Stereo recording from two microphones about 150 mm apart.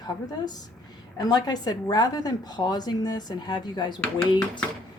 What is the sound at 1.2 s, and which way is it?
A woman's voice, 25° left (ahead or behind).